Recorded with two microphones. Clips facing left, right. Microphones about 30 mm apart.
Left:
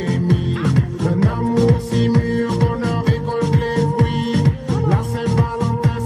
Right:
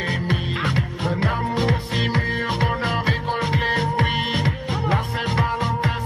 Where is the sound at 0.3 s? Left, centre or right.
Right.